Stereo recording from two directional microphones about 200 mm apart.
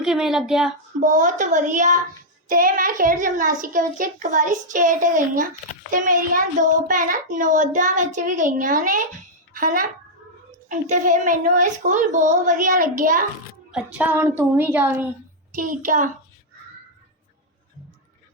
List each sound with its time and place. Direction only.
0.0 s speech: centre (ahead or behind)
0.9 s a child's voice: 40° right (ahead or behind)
13.7 s a woman's voice: 5° right (ahead or behind)
15.5 s a child's voice: 40° right (ahead or behind)